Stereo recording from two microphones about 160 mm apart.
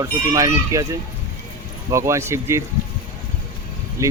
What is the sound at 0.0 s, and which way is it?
Speech, 20° right (ahead or behind).